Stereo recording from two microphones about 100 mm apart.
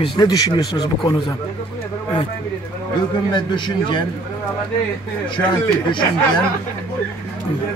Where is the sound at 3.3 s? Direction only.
50° left (ahead or behind).